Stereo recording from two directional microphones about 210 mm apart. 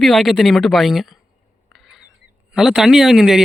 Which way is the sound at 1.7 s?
Centre (ahead or behind).